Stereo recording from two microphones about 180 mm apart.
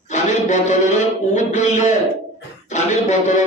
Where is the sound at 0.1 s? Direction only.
40° left (ahead or behind).